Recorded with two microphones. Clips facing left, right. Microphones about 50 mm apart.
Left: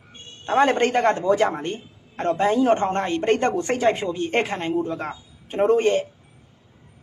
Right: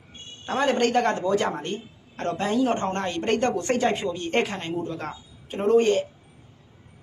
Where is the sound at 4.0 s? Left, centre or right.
Left.